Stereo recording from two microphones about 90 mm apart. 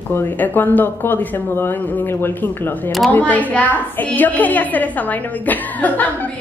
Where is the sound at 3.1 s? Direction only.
15° left (ahead or behind).